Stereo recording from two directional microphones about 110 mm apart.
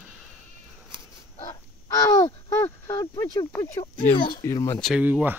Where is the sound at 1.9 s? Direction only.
30° left (ahead or behind).